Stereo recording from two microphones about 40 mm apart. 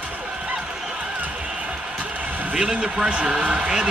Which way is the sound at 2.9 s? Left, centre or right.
Right.